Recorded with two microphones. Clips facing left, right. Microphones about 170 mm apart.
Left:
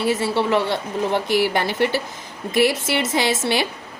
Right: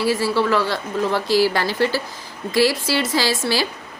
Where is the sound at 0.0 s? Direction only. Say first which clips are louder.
Right 1 dB; 25° left (ahead or behind).